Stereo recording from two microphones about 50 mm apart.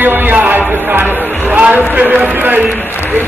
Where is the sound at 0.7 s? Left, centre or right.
Right.